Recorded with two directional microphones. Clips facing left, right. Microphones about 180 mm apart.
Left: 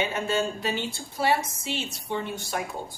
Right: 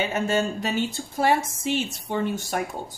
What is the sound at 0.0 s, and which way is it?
A woman's voice, 45° right (ahead or behind).